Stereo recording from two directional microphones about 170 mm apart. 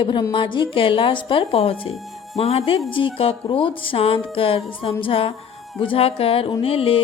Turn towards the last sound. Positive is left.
turn(degrees=35)  # may be behind; listen again after turning